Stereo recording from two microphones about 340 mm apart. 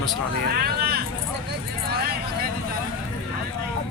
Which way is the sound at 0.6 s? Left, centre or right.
Right.